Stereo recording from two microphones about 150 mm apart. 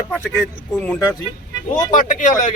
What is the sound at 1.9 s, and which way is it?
Speech, 60° left (ahead or behind).